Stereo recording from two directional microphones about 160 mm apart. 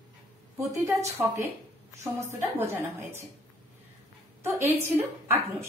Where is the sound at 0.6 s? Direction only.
20° right (ahead or behind).